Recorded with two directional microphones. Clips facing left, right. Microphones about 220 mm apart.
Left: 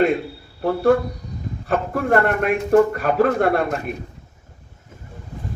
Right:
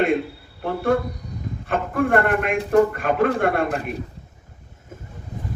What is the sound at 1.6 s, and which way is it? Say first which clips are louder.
A man's voice: even; 40° left (ahead or behind).